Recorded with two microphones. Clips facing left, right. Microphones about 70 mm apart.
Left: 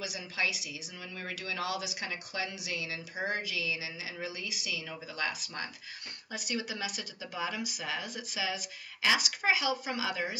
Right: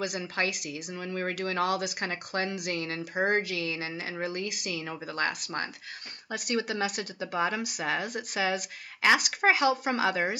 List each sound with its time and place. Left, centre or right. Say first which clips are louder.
0.0 s speech: right 5 dB; right